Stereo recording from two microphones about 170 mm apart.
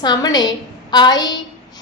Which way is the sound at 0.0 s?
25° left (ahead or behind).